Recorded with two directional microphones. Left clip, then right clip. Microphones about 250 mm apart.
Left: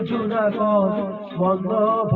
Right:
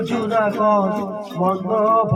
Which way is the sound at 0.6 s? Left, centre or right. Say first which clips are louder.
Right 2 dB; right.